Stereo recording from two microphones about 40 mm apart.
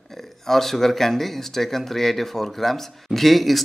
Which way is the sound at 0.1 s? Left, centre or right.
Centre.